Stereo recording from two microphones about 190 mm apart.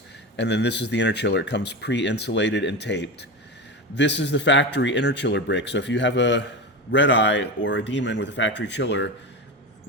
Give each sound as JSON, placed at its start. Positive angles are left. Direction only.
{"t": 0.3, "sound": "a man's voice", "side_deg": 65}